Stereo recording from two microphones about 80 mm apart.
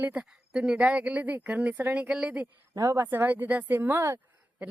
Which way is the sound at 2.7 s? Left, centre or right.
Right.